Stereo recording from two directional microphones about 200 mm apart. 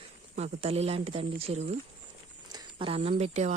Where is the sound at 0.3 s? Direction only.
30° right (ahead or behind).